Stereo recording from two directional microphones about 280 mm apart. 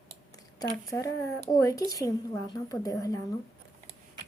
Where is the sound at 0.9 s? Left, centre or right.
Centre.